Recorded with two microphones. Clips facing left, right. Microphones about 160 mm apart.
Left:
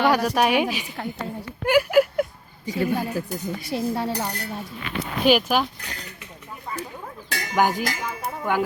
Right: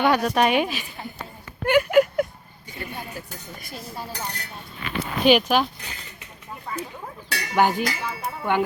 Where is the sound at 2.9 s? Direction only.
70° left (ahead or behind).